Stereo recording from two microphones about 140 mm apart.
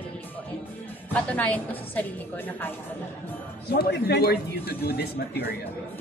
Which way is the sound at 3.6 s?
90° left.